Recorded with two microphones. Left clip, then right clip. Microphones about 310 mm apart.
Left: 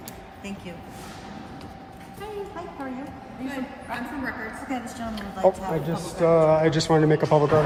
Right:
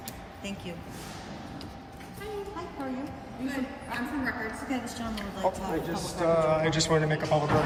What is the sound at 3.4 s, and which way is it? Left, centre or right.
Speech, centre.